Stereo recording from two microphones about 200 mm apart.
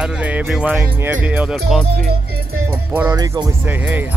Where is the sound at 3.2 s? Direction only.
15° right (ahead or behind).